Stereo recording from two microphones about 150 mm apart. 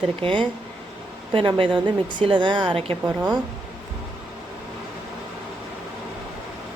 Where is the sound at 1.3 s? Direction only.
35° right (ahead or behind).